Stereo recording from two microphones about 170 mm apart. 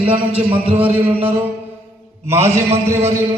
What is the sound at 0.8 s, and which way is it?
Speech, 10° right (ahead or behind).